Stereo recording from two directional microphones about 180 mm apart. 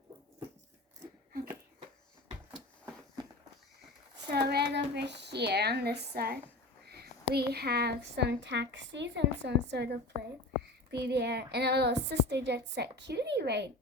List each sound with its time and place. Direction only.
4.4 s a woman's voice: 65° right (ahead or behind)